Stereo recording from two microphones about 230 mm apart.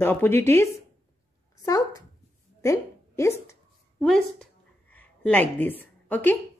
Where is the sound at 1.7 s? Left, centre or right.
Centre.